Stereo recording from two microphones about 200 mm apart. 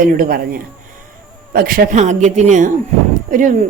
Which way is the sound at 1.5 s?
45° right (ahead or behind).